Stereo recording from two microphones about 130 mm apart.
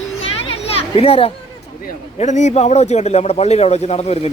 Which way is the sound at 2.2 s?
65° left (ahead or behind).